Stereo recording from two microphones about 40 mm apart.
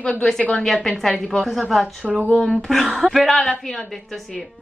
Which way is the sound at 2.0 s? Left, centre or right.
Right.